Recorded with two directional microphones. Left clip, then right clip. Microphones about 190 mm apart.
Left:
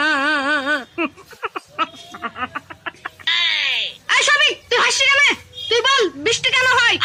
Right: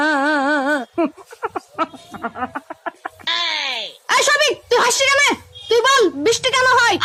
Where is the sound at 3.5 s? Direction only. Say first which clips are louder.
Left 3 dB; 60° right (ahead or behind).